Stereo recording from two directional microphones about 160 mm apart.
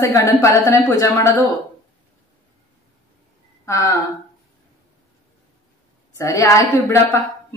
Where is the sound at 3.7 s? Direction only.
20° left (ahead or behind).